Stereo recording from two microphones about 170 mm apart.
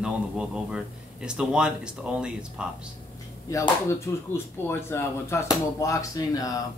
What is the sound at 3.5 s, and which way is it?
Speech, 20° left (ahead or behind).